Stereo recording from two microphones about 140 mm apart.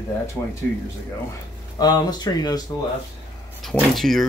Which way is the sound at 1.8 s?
30° left (ahead or behind).